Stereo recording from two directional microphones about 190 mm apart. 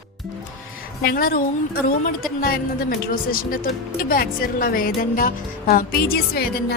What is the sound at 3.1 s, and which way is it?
Speech, 45° left (ahead or behind).